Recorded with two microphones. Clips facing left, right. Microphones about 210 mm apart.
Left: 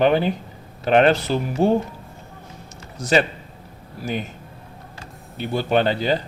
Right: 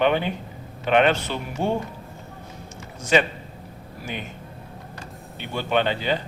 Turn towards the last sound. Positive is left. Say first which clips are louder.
# left 4 dB
turn(degrees=40)  # may be behind; listen again after turning